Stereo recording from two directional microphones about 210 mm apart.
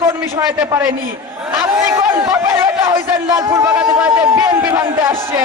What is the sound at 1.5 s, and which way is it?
A man's voice, 10° right (ahead or behind).